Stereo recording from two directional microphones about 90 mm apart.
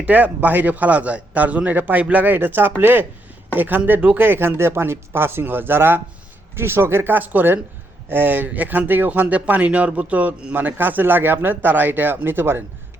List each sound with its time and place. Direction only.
0.0 s speech: 20° right (ahead or behind)